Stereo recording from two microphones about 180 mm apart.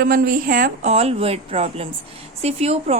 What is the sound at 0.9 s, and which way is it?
A woman's voice, 35° right (ahead or behind).